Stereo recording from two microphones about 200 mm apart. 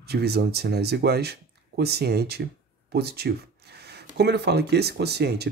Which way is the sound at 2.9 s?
50° right (ahead or behind).